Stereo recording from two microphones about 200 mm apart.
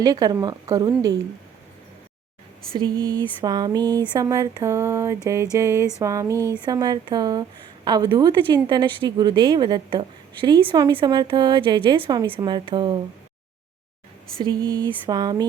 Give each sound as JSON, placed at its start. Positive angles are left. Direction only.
{"t": 0.0, "sound": "a woman's voice", "side_deg": -20}
{"t": 2.7, "sound": "a woman's voice", "side_deg": -20}
{"t": 14.4, "sound": "a woman's voice", "side_deg": -20}